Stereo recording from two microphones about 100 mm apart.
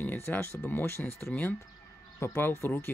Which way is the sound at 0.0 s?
20° left (ahead or behind).